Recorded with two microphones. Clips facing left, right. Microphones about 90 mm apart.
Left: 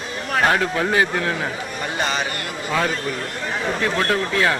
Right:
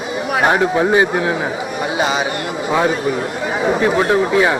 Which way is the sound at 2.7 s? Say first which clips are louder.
Right 6 dB; 15° right (ahead or behind).